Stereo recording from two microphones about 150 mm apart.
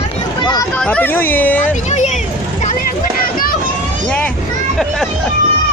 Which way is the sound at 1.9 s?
50° left (ahead or behind).